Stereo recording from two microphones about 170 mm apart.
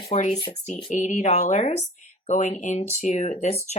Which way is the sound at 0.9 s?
45° left (ahead or behind).